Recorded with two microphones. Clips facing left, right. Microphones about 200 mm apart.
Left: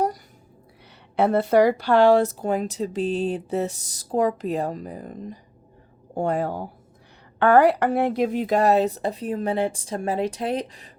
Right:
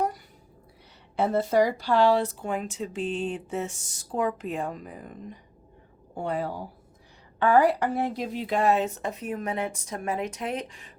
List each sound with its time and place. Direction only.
1.1 s speech: 65° left (ahead or behind)
7.3 s speech: 65° left (ahead or behind); by 10.9 s 35° left (ahead or behind)